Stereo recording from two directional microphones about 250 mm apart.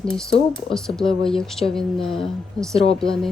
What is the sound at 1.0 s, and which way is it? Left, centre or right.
Speech, left.